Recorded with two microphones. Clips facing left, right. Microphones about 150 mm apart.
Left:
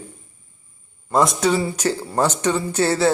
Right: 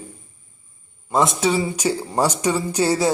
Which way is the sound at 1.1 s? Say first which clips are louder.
Left 1 dB; centre (ahead or behind).